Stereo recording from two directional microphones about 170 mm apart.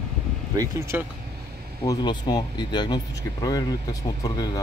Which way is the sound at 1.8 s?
25° left (ahead or behind).